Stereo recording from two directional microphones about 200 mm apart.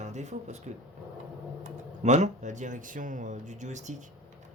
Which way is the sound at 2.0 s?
35° right (ahead or behind).